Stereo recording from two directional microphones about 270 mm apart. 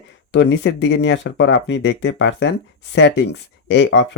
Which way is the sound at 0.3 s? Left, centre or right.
Left.